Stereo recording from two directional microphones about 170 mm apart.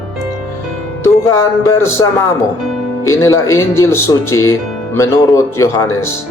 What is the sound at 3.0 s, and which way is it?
Speech, 20° left (ahead or behind).